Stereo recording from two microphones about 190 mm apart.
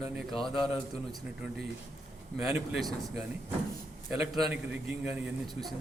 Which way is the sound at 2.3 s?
5° right (ahead or behind).